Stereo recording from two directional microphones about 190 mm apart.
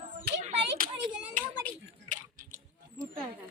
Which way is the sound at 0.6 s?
50° right (ahead or behind).